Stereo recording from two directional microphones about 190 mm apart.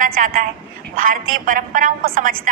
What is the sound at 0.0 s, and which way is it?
A woman's voice, 45° right (ahead or behind).